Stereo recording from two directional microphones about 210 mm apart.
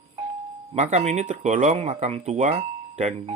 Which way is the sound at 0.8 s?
30° right (ahead or behind).